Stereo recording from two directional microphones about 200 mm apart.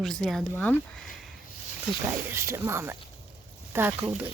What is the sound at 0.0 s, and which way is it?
Speech, centre (ahead or behind).